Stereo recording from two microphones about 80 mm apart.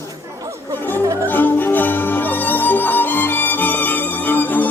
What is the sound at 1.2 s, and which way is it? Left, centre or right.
Music, left.